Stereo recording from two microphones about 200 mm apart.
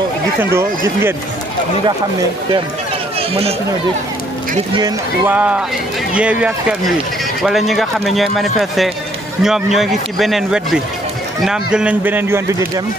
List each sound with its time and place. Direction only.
0.4 s speech: 10° right (ahead or behind)
3.2 s speech: 30° right (ahead or behind)
5.2 s a man's voice: 10° right (ahead or behind)